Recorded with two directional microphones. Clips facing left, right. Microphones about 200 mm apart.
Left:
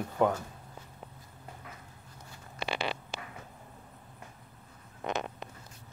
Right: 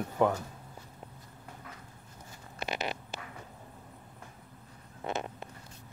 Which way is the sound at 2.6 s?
30° left (ahead or behind).